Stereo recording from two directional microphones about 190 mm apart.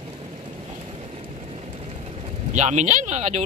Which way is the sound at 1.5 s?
30° right (ahead or behind).